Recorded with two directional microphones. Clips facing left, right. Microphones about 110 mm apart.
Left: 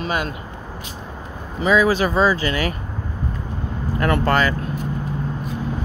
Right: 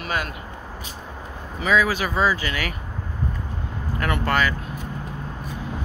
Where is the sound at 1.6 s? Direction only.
25° left (ahead or behind).